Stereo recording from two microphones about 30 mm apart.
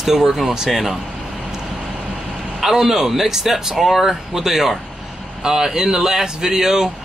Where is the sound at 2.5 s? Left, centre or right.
Centre.